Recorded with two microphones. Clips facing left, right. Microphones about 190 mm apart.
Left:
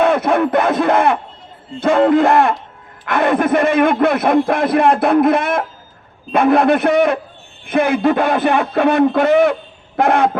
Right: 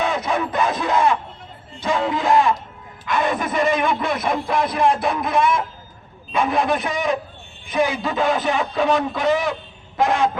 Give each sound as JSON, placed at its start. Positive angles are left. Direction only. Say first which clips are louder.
{"t": 0.0, "sound": "a man's voice", "louder": "left 8 dB", "side_deg": 60}